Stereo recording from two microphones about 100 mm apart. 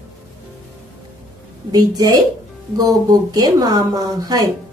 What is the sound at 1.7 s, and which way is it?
A woman's voice, 40° right (ahead or behind).